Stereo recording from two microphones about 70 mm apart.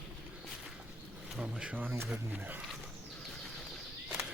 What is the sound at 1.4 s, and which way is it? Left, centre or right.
Speech, centre.